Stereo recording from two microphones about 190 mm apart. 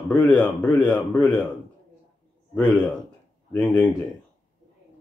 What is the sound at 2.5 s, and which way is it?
Speech, 10° left (ahead or behind).